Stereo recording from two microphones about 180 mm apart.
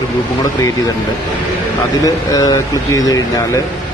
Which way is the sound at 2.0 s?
20° left (ahead or behind).